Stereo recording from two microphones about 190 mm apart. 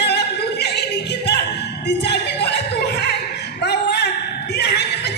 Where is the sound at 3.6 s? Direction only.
60° left (ahead or behind).